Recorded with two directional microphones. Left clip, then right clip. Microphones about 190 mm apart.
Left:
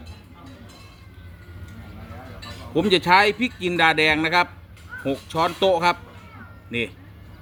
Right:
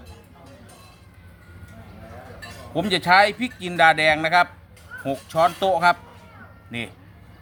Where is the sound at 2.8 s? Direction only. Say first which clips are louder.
Even; 25° right (ahead or behind).